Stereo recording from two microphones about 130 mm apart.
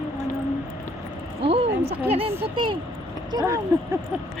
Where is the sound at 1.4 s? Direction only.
50° right (ahead or behind).